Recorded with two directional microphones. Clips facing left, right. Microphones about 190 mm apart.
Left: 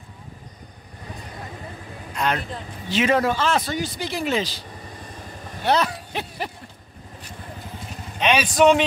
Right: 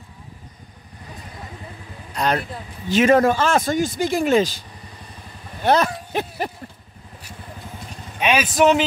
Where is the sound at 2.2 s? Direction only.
40° right (ahead or behind).